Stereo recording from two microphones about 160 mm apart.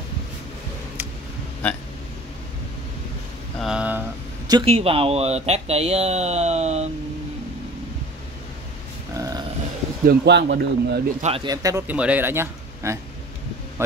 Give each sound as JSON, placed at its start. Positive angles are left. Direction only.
{"t": 1.6, "sound": "speech", "side_deg": 10}
{"t": 3.5, "sound": "a sound", "side_deg": -5}
{"t": 4.5, "sound": "speech", "side_deg": -35}
{"t": 9.1, "sound": "grunt", "side_deg": -20}
{"t": 10.0, "sound": "a man's voice", "side_deg": -90}
{"t": 11.1, "sound": "speech", "side_deg": -40}
{"t": 11.4, "sound": "speech", "side_deg": -20}
{"t": 11.9, "sound": "speech", "side_deg": -10}